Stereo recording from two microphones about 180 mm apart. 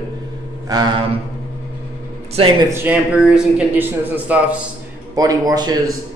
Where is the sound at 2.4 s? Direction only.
30° right (ahead or behind).